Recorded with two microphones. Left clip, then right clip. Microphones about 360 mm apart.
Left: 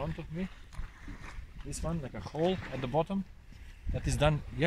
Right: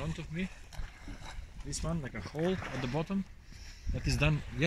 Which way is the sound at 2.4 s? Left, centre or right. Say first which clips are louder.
Left 2 dB; left.